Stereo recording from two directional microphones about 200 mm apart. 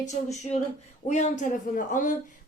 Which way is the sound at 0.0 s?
35° left (ahead or behind).